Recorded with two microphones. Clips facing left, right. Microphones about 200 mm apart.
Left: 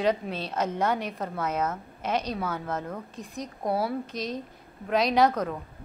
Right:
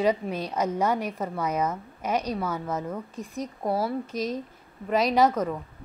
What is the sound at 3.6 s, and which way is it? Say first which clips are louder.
Speech: even; 10° left (ahead or behind).